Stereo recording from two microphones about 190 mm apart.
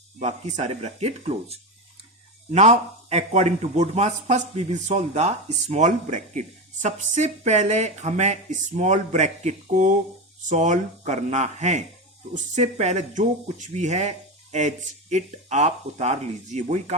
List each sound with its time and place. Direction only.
0.2 s a man's voice: 35° right (ahead or behind)
15.1 s a man's voice: 35° right (ahead or behind)